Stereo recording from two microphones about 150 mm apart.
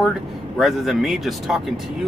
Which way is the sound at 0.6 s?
Centre (ahead or behind).